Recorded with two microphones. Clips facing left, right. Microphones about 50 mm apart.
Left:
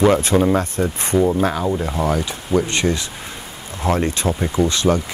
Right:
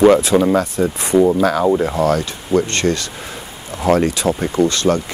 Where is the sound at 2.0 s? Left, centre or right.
Centre.